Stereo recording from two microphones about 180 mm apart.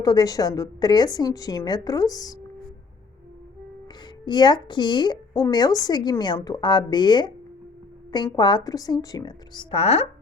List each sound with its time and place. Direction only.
0.0 s a woman's voice: 20° left (ahead or behind)
4.3 s a woman's voice: 25° left (ahead or behind)